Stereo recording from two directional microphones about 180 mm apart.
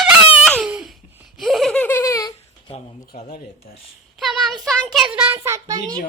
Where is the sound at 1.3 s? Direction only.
Centre (ahead or behind); by 2.3 s 20° left (ahead or behind).